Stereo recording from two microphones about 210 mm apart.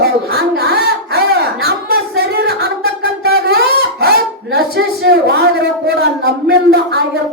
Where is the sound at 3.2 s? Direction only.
50° right (ahead or behind).